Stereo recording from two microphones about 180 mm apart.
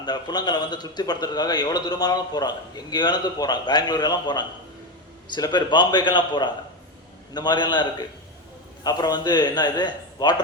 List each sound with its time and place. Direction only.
0.0 s a man's voice: 25° left (ahead or behind)